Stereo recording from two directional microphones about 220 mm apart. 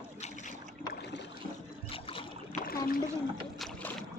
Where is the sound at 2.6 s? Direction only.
40° left (ahead or behind).